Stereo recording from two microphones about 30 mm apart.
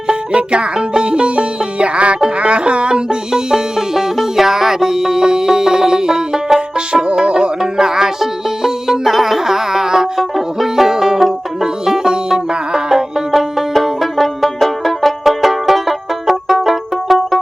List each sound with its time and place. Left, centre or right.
0.1 s music: right; by 6.6 s centre
6.7 s music: right
7.6 s music: centre
13.3 s banjo: centre